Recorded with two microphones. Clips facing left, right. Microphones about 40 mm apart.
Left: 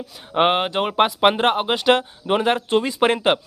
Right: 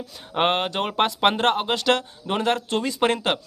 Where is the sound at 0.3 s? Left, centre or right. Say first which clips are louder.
Left 4 dB; centre.